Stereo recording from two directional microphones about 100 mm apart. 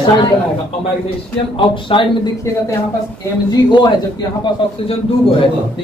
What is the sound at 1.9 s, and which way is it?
Speech, 60° left (ahead or behind).